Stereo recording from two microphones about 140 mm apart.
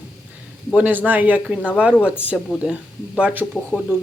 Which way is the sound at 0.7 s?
10° right (ahead or behind).